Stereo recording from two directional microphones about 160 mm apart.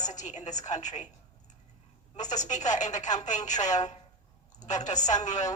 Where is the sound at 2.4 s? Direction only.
50° left (ahead or behind).